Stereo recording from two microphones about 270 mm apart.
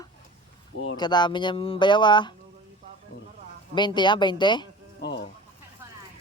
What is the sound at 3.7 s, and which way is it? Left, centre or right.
Speech, centre.